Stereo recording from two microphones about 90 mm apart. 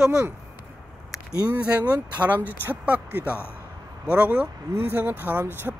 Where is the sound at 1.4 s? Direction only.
15° right (ahead or behind).